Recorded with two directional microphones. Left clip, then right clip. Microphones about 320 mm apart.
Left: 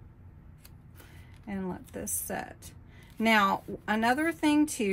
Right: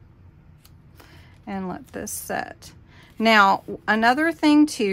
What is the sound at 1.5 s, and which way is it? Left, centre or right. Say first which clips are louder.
A woman's voice: right 7 dB; right.